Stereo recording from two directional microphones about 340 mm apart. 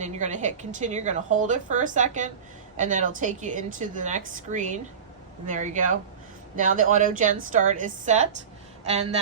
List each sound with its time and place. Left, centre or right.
0.0 s a woman's voice: right